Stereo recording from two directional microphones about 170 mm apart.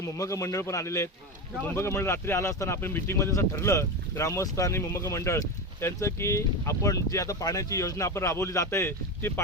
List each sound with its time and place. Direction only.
0.0 s speech: 20° left (ahead or behind)